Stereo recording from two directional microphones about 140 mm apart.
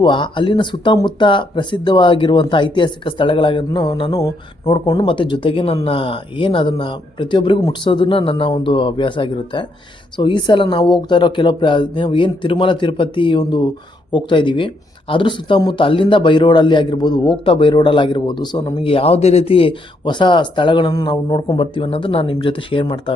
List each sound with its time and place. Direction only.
0.0 s speech: 35° left (ahead or behind)